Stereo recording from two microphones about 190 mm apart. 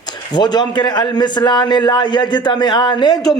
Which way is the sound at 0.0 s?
20° left (ahead or behind).